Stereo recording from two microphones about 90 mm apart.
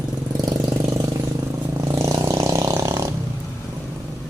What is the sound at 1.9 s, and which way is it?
Vehicle, 40° right (ahead or behind).